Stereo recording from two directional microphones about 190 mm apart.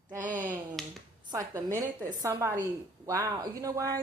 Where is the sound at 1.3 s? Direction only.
15° right (ahead or behind).